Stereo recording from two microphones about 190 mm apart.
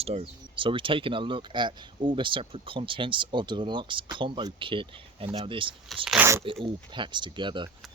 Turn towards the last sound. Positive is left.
turn(degrees=-25)  # may be behind; listen again after turning